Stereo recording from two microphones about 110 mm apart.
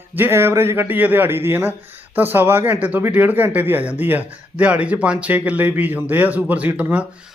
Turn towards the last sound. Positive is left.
turn(degrees=-15)  # may be behind; listen again after turning